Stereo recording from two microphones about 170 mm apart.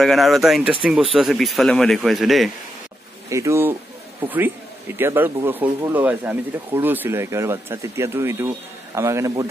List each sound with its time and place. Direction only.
0.0 s speech: centre (ahead or behind)
3.3 s a man's voice: 15° right (ahead or behind)